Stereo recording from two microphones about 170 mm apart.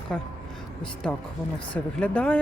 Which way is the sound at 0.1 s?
5° left (ahead or behind).